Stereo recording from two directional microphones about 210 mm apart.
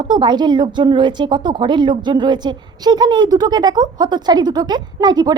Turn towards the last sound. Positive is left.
turn(degrees=-20)  # may be behind; listen again after turning